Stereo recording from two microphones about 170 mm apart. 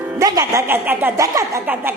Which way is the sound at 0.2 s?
20° right (ahead or behind).